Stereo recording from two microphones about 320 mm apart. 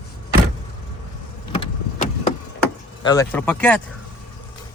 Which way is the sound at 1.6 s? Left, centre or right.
Left.